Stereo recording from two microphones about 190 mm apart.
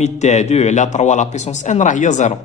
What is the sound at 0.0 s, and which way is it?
A man's voice, 35° left (ahead or behind).